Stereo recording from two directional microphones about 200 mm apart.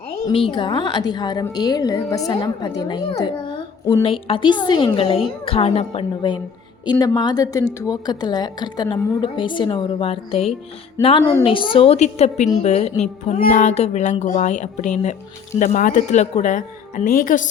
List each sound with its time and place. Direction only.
0.3 s a woman's voice: 25° left (ahead or behind); by 17.5 s 40° left (ahead or behind)